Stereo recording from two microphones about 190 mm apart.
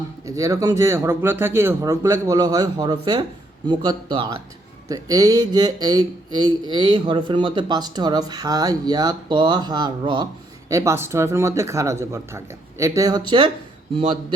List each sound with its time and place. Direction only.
0.3 s speech: 15° right (ahead or behind)